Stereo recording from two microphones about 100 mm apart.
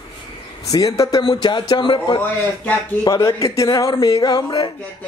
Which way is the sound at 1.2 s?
50° left (ahead or behind).